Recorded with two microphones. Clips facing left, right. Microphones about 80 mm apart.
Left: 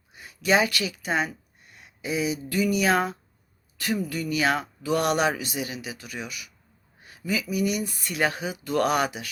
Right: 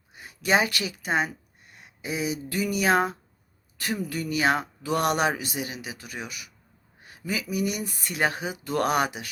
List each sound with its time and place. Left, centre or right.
0.2 s speech: right
7.5 s speech: right
8.0 s speech: right